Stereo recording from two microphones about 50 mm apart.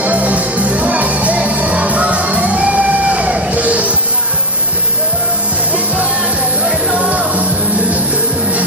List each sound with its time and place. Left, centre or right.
0.0 s music: right
6.9 s music: right